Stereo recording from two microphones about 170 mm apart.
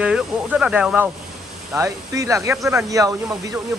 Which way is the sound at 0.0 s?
5° right (ahead or behind).